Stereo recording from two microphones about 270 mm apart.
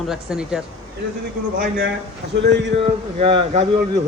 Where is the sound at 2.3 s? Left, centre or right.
Right.